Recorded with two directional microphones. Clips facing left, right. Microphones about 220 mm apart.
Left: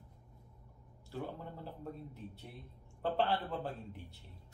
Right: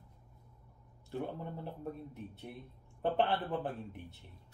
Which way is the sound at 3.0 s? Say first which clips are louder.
Right 2 dB; 20° right (ahead or behind).